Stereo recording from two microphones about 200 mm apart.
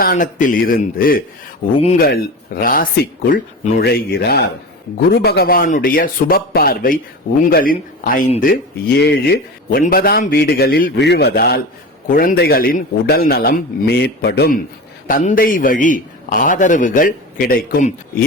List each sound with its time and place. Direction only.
0.0 s a man's voice: 40° left (ahead or behind)
9.0 s a man's voice: 55° left (ahead or behind)